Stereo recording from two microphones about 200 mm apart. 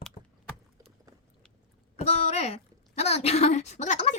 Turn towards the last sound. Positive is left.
turn(degrees=35)  # may be behind; listen again after turning